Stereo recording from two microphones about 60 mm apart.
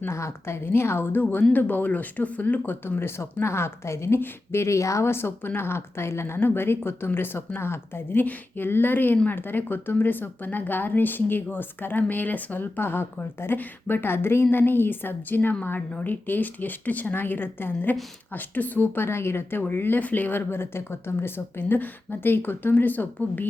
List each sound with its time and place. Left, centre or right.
0.1 s a woman's voice: left